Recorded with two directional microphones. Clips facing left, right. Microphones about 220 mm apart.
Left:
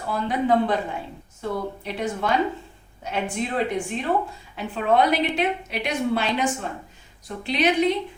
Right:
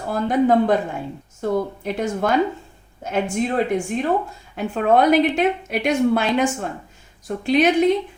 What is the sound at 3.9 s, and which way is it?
A woman's voice, 45° right (ahead or behind).